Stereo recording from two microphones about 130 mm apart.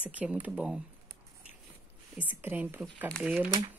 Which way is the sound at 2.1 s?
10° right (ahead or behind).